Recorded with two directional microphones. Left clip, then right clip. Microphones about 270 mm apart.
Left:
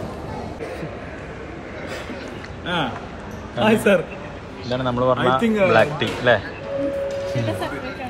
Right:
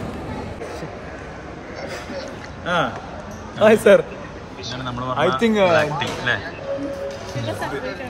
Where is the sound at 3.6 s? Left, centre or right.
Centre.